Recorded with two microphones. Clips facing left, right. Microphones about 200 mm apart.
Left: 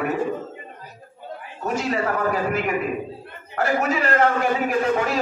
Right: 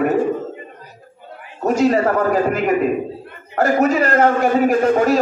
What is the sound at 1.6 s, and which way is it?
A man's voice, 45° right (ahead or behind).